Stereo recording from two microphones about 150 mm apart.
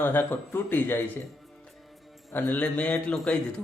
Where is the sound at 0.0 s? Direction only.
15° left (ahead or behind).